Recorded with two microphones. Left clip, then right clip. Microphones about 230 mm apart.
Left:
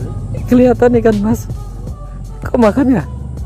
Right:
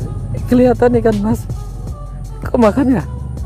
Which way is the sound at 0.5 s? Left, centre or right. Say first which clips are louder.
Left 2 dB; centre.